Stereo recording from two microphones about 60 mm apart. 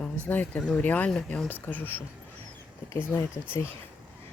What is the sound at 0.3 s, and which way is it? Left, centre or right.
Speech, left.